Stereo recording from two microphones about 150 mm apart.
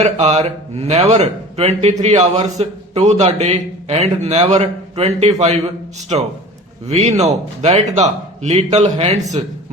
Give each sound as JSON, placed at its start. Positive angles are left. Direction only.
{"t": 0.0, "sound": "a man's voice", "side_deg": -50}